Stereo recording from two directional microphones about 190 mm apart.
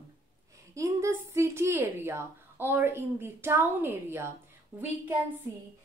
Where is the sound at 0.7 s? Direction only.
15° right (ahead or behind).